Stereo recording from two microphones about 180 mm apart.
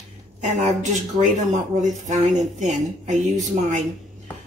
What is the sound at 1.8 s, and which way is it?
Speech, 40° right (ahead or behind).